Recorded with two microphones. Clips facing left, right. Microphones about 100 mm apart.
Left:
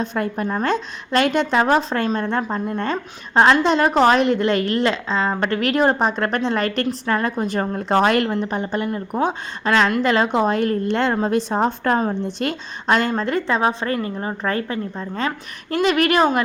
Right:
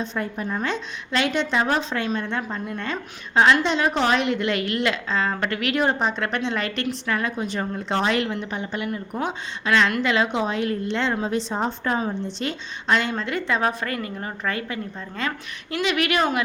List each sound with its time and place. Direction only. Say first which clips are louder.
0.0 s a woman's voice: left 5 dB; 55° left (ahead or behind); by 13.6 s 40° left (ahead or behind)
13.6 s a woman's voice: left 4 dB; 25° left (ahead or behind)